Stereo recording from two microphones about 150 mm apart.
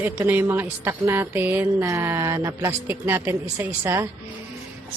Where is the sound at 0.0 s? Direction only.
10° right (ahead or behind).